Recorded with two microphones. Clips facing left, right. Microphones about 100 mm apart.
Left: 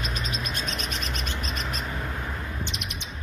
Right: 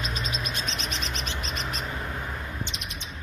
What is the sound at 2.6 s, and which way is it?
Bird, 60° left (ahead or behind).